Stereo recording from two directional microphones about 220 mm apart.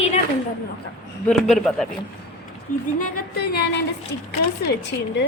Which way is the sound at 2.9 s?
40° left (ahead or behind).